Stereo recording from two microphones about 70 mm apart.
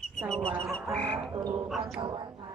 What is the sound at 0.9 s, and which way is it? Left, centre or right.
Speech, centre.